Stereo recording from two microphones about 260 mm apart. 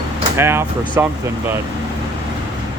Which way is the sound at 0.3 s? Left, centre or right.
Centre.